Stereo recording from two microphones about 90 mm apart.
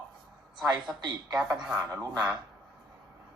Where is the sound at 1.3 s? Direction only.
10° right (ahead or behind).